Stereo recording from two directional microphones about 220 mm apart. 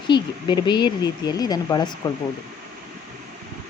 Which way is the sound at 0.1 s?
20° left (ahead or behind).